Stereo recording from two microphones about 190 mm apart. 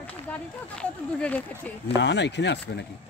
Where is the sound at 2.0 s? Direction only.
65° left (ahead or behind).